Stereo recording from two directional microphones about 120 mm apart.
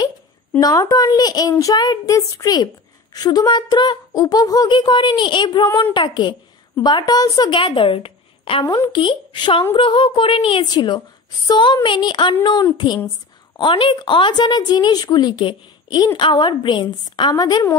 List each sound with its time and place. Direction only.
0.6 s a woman's voice: 30° left (ahead or behind)